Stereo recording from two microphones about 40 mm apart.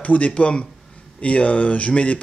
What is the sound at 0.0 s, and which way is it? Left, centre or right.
Speech, left.